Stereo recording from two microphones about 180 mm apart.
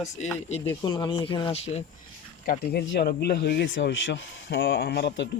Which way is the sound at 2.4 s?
65° left (ahead or behind).